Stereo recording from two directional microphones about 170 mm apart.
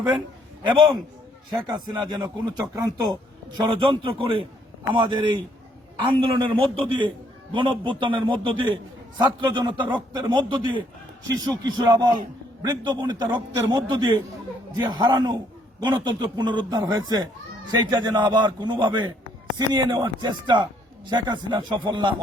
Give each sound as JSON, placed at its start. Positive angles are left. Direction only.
{"t": 1.5, "sound": "a man's voice", "side_deg": -25}